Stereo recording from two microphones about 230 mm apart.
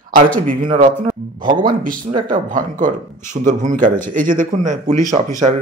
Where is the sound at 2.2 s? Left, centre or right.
Right.